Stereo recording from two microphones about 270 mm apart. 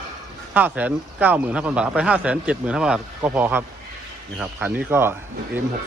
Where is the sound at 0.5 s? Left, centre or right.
Centre.